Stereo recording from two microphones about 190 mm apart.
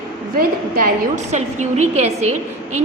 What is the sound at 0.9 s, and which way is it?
A woman's voice, 40° right (ahead or behind).